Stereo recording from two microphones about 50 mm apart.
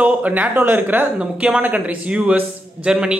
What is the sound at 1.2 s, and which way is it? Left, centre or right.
Speech, centre.